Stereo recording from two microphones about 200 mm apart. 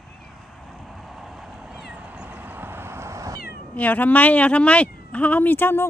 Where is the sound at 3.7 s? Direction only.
10° left (ahead or behind).